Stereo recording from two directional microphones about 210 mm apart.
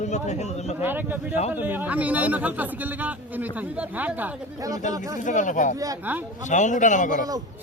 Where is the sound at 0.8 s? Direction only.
10° right (ahead or behind).